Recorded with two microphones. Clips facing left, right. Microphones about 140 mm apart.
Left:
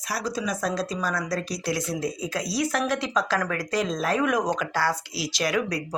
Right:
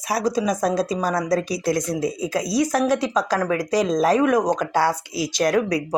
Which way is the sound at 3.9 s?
40° right (ahead or behind).